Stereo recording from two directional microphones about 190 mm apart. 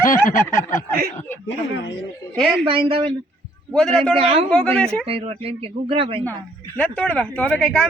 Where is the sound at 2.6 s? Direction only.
25° right (ahead or behind).